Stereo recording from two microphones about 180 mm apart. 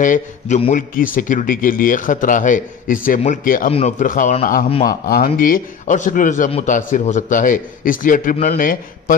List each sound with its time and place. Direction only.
0.0 s speech: 45° left (ahead or behind)